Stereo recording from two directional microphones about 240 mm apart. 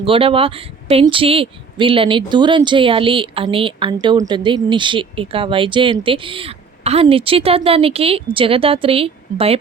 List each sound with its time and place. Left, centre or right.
0.0 s speech: right